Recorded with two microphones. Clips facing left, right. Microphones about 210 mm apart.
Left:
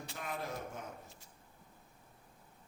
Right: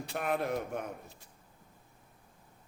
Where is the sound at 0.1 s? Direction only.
65° right (ahead or behind).